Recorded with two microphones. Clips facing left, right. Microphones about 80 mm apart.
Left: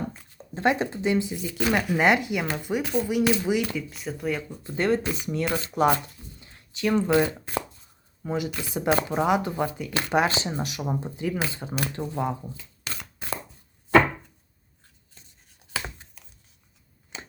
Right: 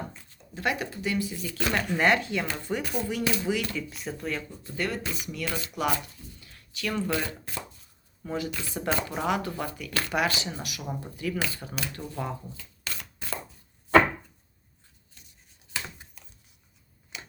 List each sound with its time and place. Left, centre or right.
0.3 s speech: left
3.8 s speech: centre
4.6 s speech: left
6.4 s a sound: left
8.2 s speech: centre
11.9 s shuffling cards: left
17.1 s a sound: left